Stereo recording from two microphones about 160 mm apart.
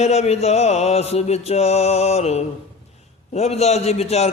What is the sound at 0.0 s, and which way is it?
Mantra, 40° left (ahead or behind).